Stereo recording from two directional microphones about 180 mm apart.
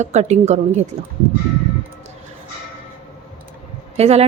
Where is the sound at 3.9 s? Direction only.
35° right (ahead or behind).